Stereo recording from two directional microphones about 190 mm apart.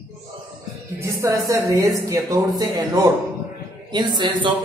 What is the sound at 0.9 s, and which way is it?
A man's voice, 15° right (ahead or behind).